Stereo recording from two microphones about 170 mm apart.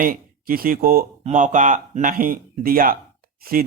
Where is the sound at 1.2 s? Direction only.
45° right (ahead or behind).